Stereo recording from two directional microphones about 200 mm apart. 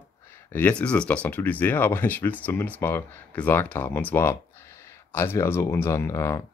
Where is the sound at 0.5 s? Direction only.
10° left (ahead or behind).